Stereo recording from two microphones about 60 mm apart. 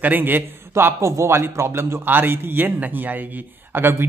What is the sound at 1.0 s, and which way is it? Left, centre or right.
A man's voice, right.